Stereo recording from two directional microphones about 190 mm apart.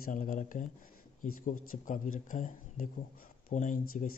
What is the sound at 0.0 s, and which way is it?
Speech, 45° left (ahead or behind).